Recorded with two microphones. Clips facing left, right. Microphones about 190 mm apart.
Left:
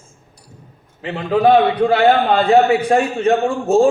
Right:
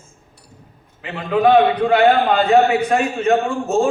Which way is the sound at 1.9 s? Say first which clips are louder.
Left 1 dB; 35° left (ahead or behind).